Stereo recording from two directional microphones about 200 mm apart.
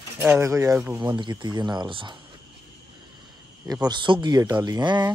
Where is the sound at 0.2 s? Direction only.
10° right (ahead or behind).